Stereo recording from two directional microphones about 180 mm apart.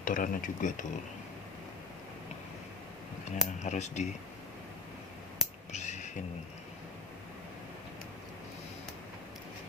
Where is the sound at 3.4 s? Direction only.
40° left (ahead or behind).